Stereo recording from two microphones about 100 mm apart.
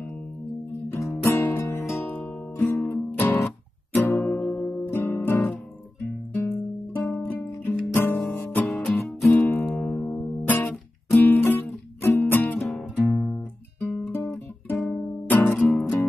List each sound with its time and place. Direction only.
0.9 s music: 25° left (ahead or behind)
7.0 s music: 15° left (ahead or behind)
8.6 s music: centre (ahead or behind)
9.3 s music: 25° left (ahead or behind)
9.8 s music: 15° left (ahead or behind)
12.5 s music: centre (ahead or behind)
12.9 s music: 15° left (ahead or behind)
13.7 s guitar: 15° left (ahead or behind)
15.8 s music: 20° left (ahead or behind)